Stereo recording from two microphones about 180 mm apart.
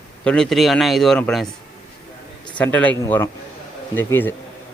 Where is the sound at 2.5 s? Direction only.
10° left (ahead or behind).